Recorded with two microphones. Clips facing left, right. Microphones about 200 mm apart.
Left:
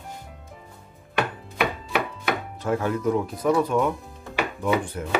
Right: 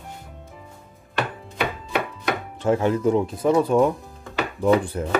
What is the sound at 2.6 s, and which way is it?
Speech, 25° right (ahead or behind).